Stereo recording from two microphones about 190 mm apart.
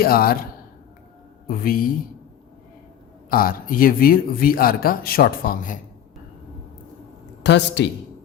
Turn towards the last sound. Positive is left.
turn(degrees=65)  # may be behind; listen again after turning